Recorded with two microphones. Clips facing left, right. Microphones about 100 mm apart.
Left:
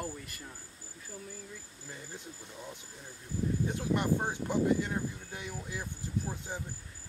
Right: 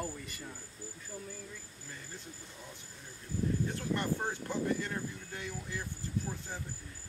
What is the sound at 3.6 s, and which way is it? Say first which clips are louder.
Speech: left 4 dB; 15° left (ahead or behind).